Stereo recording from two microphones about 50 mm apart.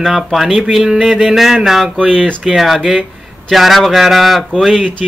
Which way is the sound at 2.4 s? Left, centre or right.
Centre.